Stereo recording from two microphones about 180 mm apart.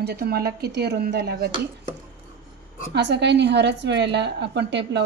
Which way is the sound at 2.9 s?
75° right (ahead or behind).